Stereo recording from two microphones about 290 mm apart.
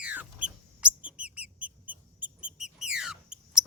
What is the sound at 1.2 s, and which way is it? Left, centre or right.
Mouse, centre.